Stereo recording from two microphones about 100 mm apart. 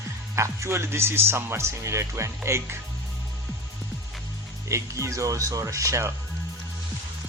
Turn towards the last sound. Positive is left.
turn(degrees=-30)  # may be behind; listen again after turning